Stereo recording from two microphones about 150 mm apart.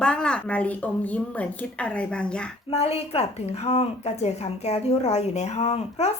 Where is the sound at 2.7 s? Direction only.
40° left (ahead or behind).